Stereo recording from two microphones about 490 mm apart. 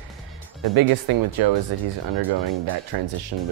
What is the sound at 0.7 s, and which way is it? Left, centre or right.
Speech, right.